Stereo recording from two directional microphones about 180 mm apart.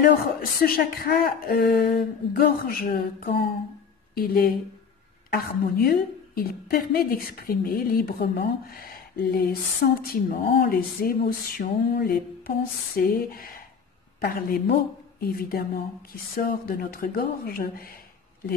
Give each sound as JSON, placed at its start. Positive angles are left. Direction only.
{"t": 0.4, "sound": "a woman's voice", "side_deg": 55}